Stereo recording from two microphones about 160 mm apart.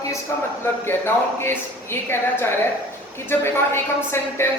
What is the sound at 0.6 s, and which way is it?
A woman's voice, 15° left (ahead or behind).